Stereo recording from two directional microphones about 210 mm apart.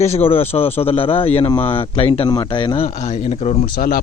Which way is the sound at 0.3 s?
25° left (ahead or behind).